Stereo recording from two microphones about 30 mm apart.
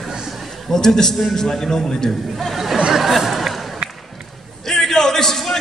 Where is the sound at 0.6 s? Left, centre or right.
Centre.